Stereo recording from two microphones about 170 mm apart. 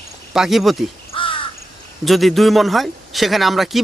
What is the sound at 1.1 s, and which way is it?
Crow, 30° left (ahead or behind).